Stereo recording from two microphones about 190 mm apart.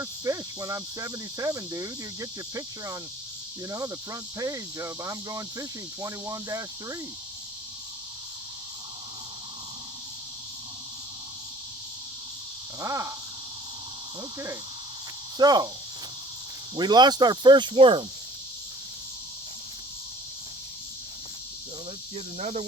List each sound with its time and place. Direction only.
0.0 s cricket: 15° right (ahead or behind)
12.8 s cricket: 15° right (ahead or behind)
15.4 s speech: 20° right (ahead or behind)
16.7 s speech: 20° right (ahead or behind)
22.1 s speech: 35° right (ahead or behind)